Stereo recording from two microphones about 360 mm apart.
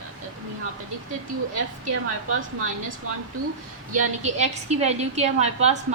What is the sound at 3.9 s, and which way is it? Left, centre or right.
A woman's voice, centre.